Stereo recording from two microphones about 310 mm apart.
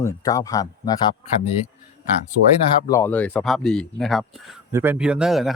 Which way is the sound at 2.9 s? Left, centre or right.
Centre.